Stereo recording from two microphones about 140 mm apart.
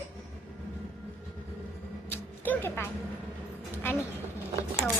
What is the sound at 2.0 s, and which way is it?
Music, 15° left (ahead or behind).